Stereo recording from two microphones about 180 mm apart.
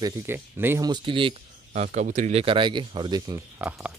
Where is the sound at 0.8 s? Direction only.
25° right (ahead or behind).